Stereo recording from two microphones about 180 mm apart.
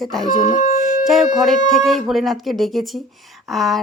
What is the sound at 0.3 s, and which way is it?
Speech, 45° left (ahead or behind).